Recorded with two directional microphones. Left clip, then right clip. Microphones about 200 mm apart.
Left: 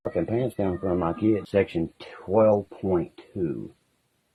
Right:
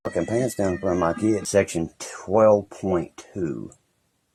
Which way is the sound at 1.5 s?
Centre (ahead or behind).